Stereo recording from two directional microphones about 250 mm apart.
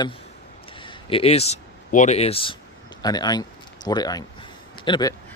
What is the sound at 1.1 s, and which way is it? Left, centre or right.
Speech, left.